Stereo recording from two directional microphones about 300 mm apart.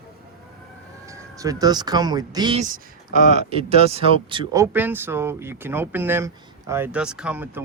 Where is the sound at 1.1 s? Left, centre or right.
Centre.